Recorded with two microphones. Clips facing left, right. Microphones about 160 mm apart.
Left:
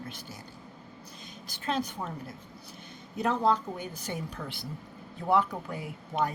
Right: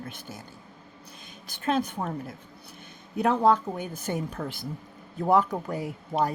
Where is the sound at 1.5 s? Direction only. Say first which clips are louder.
Right 5 dB; 55° right (ahead or behind).